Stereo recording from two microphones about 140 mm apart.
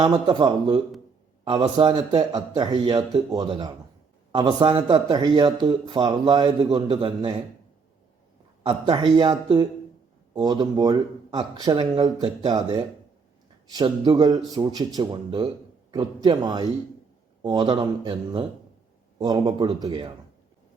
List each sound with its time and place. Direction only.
0.0 s a man's voice: 35° right (ahead or behind)
8.6 s a man's voice: 30° right (ahead or behind)
13.7 s a man's voice: 30° right (ahead or behind)